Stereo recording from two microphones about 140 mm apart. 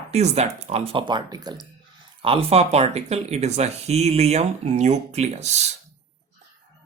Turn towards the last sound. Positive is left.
turn(degrees=-55)  # may be behind; listen again after turning